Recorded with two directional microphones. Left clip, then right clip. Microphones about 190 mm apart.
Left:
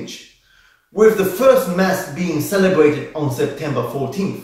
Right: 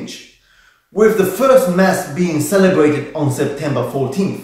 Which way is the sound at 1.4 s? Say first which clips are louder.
Right 2 dB; 15° right (ahead or behind).